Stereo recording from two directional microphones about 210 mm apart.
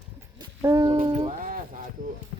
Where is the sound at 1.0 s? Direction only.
30° right (ahead or behind).